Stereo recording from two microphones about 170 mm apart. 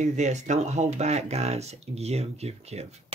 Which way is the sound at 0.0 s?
45° right (ahead or behind).